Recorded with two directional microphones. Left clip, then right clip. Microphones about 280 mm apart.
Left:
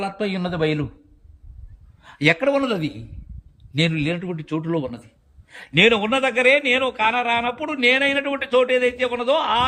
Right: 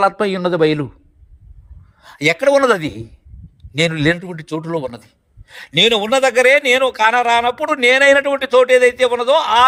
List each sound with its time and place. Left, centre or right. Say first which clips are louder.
0.2 s a man's voice: right 8 dB; centre
2.0 s a man's voice: right 3 dB; centre